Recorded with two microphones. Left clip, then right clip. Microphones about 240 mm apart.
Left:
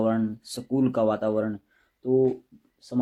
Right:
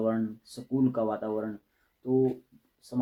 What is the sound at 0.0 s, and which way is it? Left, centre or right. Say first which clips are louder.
Speech: left 4 dB; left.